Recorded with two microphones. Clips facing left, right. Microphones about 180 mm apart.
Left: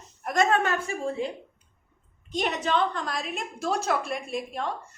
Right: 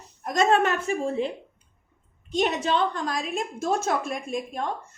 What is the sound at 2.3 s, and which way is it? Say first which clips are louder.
A woman's voice: right 2 dB; 40° right (ahead or behind).